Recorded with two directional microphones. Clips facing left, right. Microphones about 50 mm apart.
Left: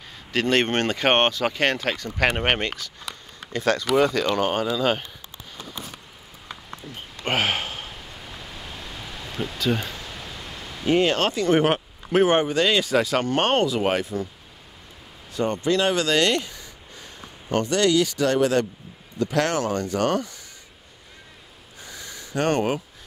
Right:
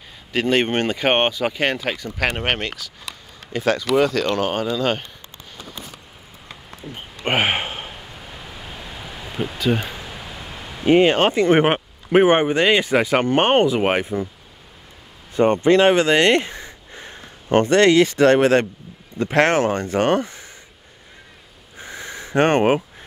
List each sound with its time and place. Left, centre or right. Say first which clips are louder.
0.3 s speech: right 2 dB; centre
2.1 s speech: left 1 dB; centre
6.8 s a sound: right 7 dB; centre
10.9 s speech: right 6 dB; right
15.3 s speech: right 8 dB; right
21.7 s a sound: right 7 dB; right